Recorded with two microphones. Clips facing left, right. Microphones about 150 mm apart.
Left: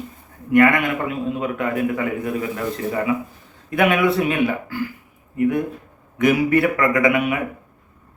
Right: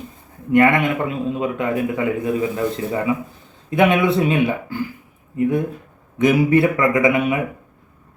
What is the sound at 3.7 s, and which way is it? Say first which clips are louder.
Speech: right 2 dB; 25° right (ahead or behind).